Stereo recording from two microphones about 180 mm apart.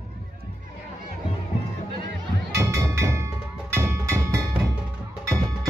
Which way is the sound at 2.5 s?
15° right (ahead or behind).